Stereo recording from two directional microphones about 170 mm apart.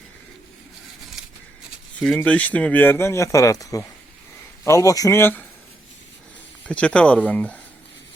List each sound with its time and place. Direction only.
2.1 s speech: 10° left (ahead or behind)
6.7 s speech: 5° left (ahead or behind)